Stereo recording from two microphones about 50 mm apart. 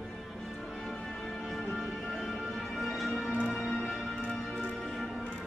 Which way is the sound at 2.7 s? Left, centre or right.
Centre.